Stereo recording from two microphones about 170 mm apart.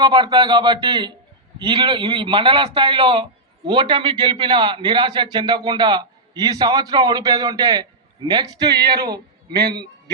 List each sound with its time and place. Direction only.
0.0 s a man's voice: 25° right (ahead or behind)
8.7 s speech: 70° right (ahead or behind)